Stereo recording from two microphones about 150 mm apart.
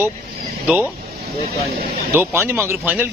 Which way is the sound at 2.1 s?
15° right (ahead or behind).